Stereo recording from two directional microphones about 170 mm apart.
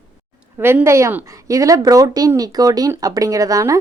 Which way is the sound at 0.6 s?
15° right (ahead or behind).